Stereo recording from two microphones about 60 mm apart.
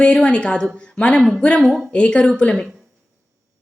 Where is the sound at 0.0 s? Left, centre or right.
Centre.